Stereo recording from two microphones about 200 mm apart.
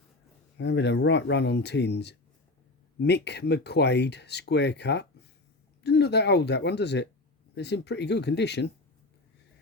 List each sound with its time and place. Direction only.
0.6 s speech: 60° left (ahead or behind)